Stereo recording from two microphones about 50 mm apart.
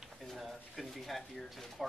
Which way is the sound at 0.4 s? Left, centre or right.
Centre.